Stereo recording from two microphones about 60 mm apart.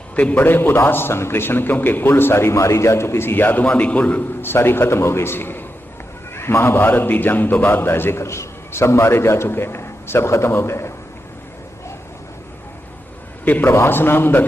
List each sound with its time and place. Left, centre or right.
0.2 s a man's voice: left
0.4 s a man's voice: left
4.4 s a man's voice: left
13.4 s a man's voice: left
13.7 s a man's voice: left